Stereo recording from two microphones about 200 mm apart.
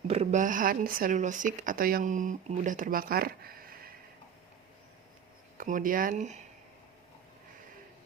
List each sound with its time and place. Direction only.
0.1 s speech: 35° right (ahead or behind)
5.5 s speech: 40° right (ahead or behind)